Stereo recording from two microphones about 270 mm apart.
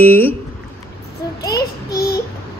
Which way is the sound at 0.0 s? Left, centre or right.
Centre.